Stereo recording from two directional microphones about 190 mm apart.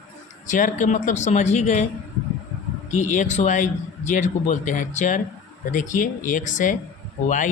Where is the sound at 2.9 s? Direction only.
40° left (ahead or behind).